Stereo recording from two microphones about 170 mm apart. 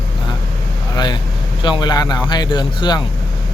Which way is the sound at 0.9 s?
25° left (ahead or behind).